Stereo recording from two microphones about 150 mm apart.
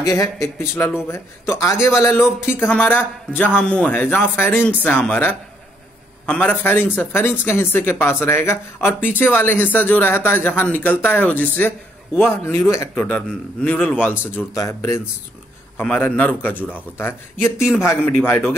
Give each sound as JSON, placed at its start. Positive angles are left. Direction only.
{"t": 0.0, "sound": "a man's voice", "side_deg": 20}